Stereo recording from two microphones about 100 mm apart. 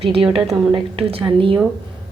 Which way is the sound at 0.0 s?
65° right (ahead or behind).